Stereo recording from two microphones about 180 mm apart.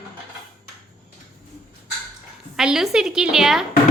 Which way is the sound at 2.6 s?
5° right (ahead or behind).